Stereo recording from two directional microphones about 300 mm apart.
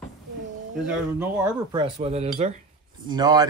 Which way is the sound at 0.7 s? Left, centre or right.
Centre.